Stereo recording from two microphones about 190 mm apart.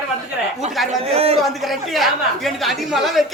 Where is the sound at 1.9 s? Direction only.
Centre (ahead or behind).